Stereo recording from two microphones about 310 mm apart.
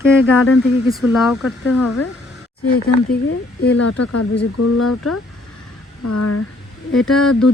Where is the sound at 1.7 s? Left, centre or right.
Left.